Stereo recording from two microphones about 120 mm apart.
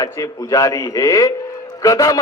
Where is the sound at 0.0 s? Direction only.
30° left (ahead or behind).